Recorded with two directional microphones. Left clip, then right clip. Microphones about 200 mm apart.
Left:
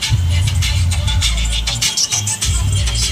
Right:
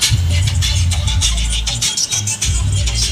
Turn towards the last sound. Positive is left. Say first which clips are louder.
# even
turn(degrees=0)  # may be behind; listen again after turning